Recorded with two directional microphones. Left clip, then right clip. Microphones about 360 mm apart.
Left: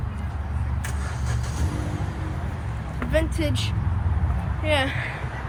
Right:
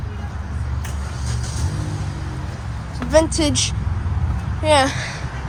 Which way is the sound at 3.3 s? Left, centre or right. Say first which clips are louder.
Right 8 dB; centre.